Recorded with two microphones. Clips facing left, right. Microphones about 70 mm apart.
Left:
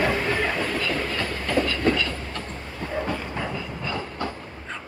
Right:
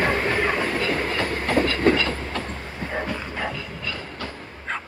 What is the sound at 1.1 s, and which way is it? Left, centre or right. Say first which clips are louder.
Train: right 3 dB; right.